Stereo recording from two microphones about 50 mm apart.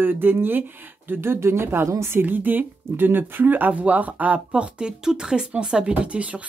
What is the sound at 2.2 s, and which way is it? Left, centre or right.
Speech, right.